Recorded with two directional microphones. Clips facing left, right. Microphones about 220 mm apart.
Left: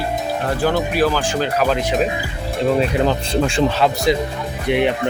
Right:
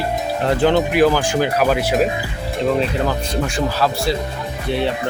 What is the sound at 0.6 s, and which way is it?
Speech, 20° right (ahead or behind).